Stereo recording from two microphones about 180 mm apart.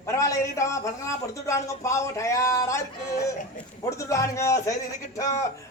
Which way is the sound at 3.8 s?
15° left (ahead or behind).